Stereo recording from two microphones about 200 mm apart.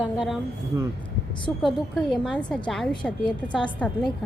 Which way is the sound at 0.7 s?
10° right (ahead or behind).